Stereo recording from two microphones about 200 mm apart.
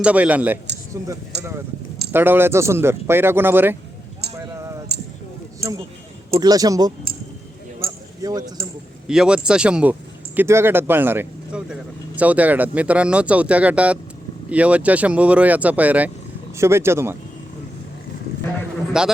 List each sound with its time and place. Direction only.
0.0 s speech: 5° right (ahead or behind)
1.3 s speech: 55° right (ahead or behind)
2.1 s speech: 10° right (ahead or behind)
4.4 s a sound: 15° right (ahead or behind)
4.9 s a sound: 55° right (ahead or behind)
6.4 s speech: 20° right (ahead or behind)
7.9 s a sound: 20° right (ahead or behind)
9.0 s speech: 5° right (ahead or behind)
19.0 s speech: 5° right (ahead or behind)